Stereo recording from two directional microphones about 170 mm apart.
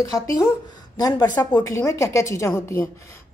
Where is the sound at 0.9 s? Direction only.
20° left (ahead or behind).